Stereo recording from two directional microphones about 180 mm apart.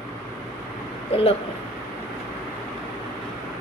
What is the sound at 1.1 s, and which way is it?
Speech, 35° left (ahead or behind).